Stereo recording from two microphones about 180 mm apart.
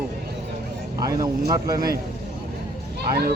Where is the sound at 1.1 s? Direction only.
20° right (ahead or behind).